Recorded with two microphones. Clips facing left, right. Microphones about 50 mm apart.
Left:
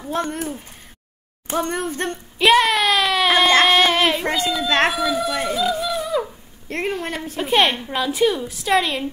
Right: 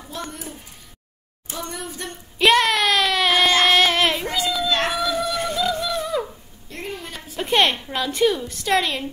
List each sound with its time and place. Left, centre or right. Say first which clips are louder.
0.1 s speech: left 9 dB; left
1.5 s speech: left 9 dB; left
2.3 s a sound: left 1 dB; centre
3.6 s child singing: left 1 dB; centre
4.2 s a child's voice: left 3 dB; left
4.6 s speech: left 6 dB; left
4.9 s speech: left 2 dB; centre
6.7 s speech: left 8 dB; left
7.3 s a woman's voice: left 1 dB; centre